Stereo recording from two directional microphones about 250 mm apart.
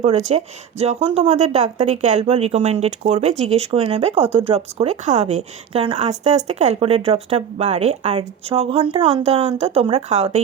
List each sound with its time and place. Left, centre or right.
0.0 s a woman's voice: right